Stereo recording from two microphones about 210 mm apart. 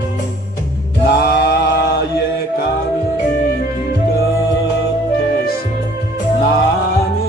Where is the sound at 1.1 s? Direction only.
50° left (ahead or behind).